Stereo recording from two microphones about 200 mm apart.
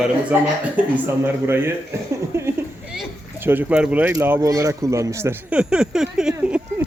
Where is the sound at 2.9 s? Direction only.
10° right (ahead or behind).